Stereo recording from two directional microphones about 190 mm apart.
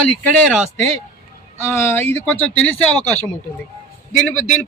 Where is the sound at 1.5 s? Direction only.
15° left (ahead or behind).